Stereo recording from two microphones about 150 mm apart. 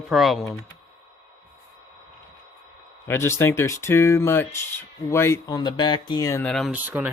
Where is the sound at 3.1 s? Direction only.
15° left (ahead or behind).